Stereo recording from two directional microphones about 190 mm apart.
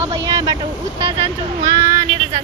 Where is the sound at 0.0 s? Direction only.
15° right (ahead or behind).